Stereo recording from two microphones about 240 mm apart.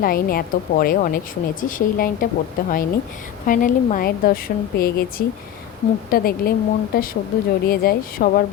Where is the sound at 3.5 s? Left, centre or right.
Left.